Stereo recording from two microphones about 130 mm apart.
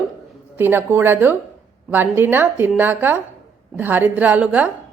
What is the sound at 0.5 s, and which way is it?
A woman's voice, 15° right (ahead or behind).